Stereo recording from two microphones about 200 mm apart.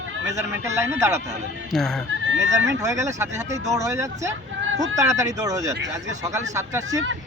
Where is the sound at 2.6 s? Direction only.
15° right (ahead or behind).